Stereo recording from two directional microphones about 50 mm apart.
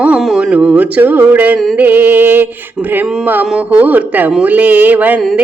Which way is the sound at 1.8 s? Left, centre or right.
Right.